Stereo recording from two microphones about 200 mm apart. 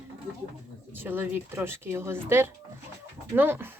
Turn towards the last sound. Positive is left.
turn(degrees=-10)  # may be behind; listen again after turning